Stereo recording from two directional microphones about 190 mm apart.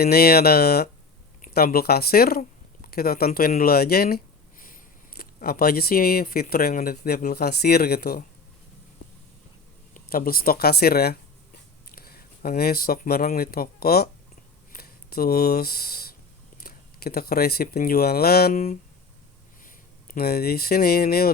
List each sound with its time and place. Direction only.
0.0 s speech: 55° left (ahead or behind)
9.9 s speech: 50° left (ahead or behind)
14.7 s a sound: 50° left (ahead or behind)
16.6 s speech: 55° left (ahead or behind)